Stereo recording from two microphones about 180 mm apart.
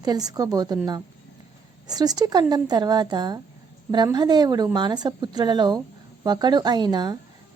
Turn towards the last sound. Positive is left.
turn(degrees=-25)  # may be behind; listen again after turning